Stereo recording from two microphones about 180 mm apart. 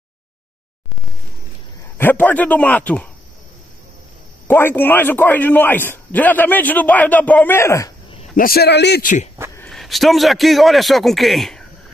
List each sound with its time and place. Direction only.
2.0 s a man's voice: 10° left (ahead or behind)
4.5 s a man's voice: 10° left (ahead or behind)
8.4 s speech: 55° left (ahead or behind)
9.0 s speech: 45° left (ahead or behind)
9.6 s a man's voice: centre (ahead or behind)